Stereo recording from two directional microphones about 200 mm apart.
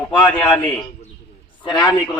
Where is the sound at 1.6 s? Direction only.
20° left (ahead or behind).